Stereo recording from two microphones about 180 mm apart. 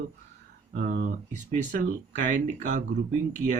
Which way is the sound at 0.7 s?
50° right (ahead or behind).